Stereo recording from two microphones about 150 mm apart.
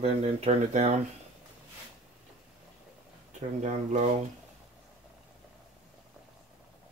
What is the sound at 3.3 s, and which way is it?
Speech, 50° right (ahead or behind).